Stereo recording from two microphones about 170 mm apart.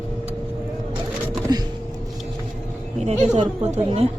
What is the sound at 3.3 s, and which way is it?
Speech, 40° right (ahead or behind).